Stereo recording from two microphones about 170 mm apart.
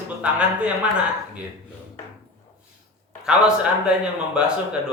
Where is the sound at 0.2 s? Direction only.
5° right (ahead or behind).